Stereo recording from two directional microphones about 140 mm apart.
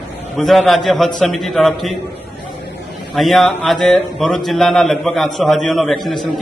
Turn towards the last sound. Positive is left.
turn(degrees=0)  # may be behind; listen again after turning